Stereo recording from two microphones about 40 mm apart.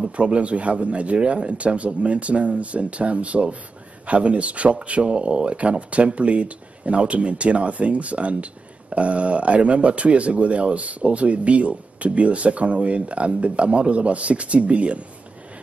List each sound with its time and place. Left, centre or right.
0.1 s speech: right